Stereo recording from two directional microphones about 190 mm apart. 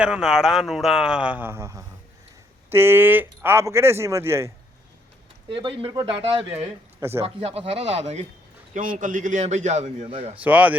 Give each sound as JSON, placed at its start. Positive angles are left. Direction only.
{"t": 0.0, "sound": "a man's voice", "side_deg": -5}
{"t": 5.5, "sound": "a man's voice", "side_deg": -25}
{"t": 10.4, "sound": "speech", "side_deg": -10}